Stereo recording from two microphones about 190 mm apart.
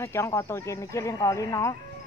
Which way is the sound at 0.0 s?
15° left (ahead or behind).